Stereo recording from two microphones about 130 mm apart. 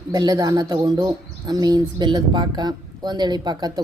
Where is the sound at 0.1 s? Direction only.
30° right (ahead or behind).